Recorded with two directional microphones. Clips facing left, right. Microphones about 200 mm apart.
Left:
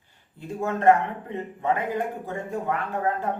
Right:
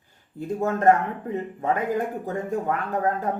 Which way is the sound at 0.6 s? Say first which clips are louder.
Even; 45° right (ahead or behind).